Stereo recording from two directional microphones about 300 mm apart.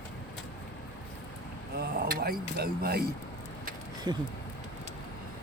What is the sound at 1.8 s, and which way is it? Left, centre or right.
Speech, right.